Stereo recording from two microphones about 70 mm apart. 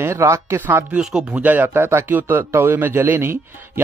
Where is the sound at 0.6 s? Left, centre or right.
Right.